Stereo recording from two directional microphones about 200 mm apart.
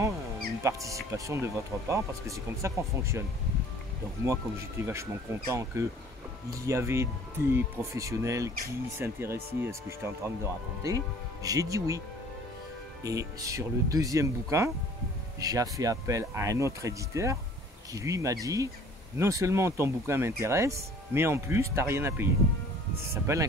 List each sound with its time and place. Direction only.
0.6 s speech: 15° right (ahead or behind)
4.3 s speech: 15° right (ahead or behind)
13.0 s speech: 15° right (ahead or behind)